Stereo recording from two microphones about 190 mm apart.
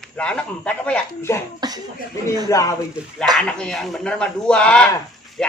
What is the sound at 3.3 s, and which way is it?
Speech, 5° left (ahead or behind).